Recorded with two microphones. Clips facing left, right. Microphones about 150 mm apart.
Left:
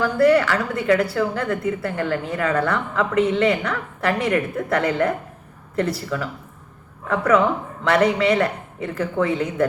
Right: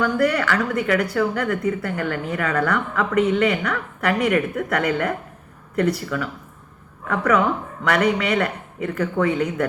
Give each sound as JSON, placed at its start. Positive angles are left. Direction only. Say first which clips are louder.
{"t": 0.0, "sound": "a woman's voice", "louder": "left 4 dB", "side_deg": 30}
{"t": 7.9, "sound": "a woman's voice", "louder": "left 2 dB", "side_deg": 30}